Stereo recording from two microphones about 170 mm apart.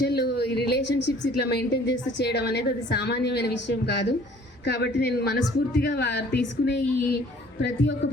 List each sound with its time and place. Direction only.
0.0 s speech: 75° left (ahead or behind)